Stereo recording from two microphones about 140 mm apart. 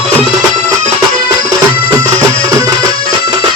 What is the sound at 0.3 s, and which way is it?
Music, 25° right (ahead or behind).